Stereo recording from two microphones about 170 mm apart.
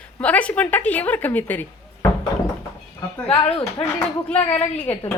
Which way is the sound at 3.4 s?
35° left (ahead or behind).